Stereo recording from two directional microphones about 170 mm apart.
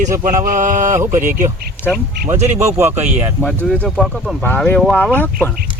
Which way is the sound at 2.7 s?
10° right (ahead or behind).